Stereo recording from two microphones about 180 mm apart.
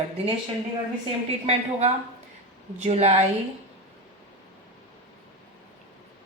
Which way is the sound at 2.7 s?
35° right (ahead or behind).